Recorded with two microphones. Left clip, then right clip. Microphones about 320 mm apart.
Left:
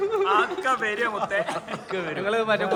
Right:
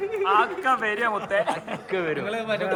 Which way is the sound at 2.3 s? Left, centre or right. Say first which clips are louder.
Left 4 dB; left.